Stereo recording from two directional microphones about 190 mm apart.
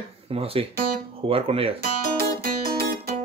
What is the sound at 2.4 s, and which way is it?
Guitar, 50° right (ahead or behind).